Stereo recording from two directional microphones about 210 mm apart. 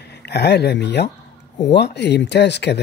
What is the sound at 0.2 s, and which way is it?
Speech, 50° left (ahead or behind).